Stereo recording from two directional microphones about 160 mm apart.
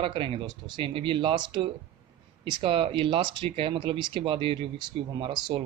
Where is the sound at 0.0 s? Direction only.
30° right (ahead or behind).